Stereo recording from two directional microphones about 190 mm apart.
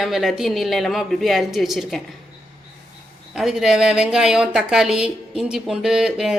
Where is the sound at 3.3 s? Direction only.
Centre (ahead or behind).